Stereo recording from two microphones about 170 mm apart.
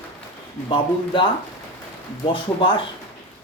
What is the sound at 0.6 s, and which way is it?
Speech, 30° left (ahead or behind).